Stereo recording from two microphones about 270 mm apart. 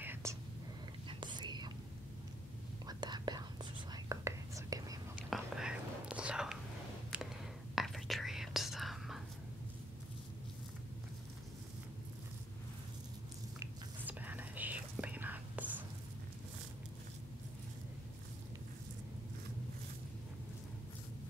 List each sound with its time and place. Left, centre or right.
0.0 s whispering: centre
2.9 s whispering: centre
5.3 s whispering: centre
7.7 s whispering: centre
13.6 s whispering: centre